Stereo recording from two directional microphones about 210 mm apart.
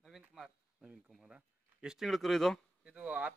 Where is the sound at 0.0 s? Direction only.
Centre (ahead or behind).